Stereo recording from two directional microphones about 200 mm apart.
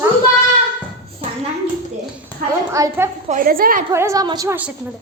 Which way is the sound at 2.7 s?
15° right (ahead or behind).